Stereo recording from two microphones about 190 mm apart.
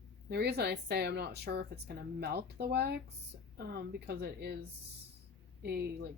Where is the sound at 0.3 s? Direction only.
60° right (ahead or behind).